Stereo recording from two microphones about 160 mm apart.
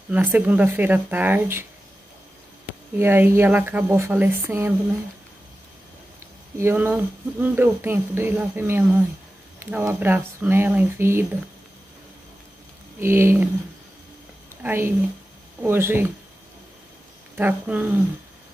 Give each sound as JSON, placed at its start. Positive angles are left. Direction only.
{"t": 0.1, "sound": "speech", "side_deg": -10}
{"t": 3.0, "sound": "speech", "side_deg": -15}
{"t": 6.6, "sound": "speech", "side_deg": -10}
{"t": 13.0, "sound": "speech", "side_deg": -15}
{"t": 14.6, "sound": "speech", "side_deg": -15}
{"t": 17.4, "sound": "speech", "side_deg": -10}